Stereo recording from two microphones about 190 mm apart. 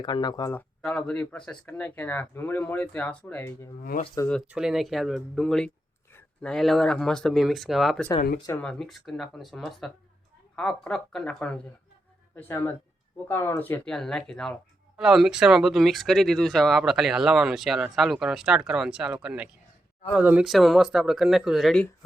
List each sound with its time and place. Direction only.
0.0 s speech: 20° left (ahead or behind)
0.8 s speech: 5° left (ahead or behind); by 4.3 s 20° left (ahead or behind)
4.4 s speech: 5° right (ahead or behind)